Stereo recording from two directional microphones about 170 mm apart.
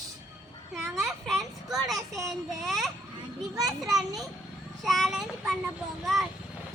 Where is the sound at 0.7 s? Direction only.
Centre (ahead or behind).